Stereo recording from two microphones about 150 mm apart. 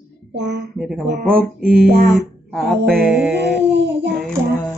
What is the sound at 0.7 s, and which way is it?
Speech, 5° right (ahead or behind).